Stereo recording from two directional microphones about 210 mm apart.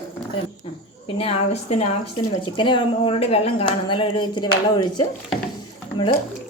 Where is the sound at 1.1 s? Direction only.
25° left (ahead or behind).